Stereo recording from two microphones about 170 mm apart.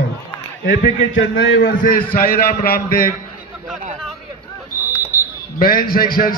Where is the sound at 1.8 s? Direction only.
55° left (ahead or behind).